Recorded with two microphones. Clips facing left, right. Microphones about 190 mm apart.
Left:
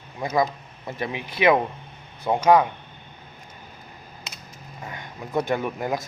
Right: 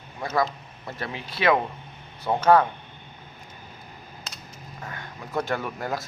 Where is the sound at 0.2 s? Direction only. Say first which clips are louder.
Left 2 dB; 15° left (ahead or behind).